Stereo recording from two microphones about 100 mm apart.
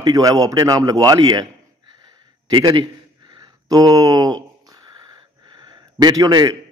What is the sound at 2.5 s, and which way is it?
Speech, 50° right (ahead or behind).